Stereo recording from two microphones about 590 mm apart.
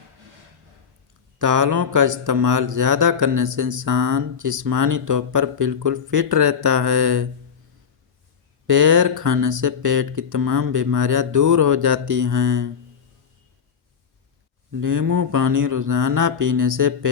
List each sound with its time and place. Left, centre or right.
1.4 s mantra: right
8.6 s mantra: right
14.7 s mantra: right